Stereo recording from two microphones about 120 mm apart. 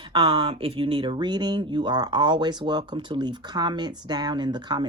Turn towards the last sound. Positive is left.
turn(degrees=-35)  # may be behind; listen again after turning